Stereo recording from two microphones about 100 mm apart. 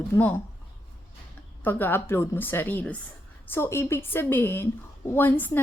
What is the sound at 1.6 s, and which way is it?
A woman's voice, 20° left (ahead or behind).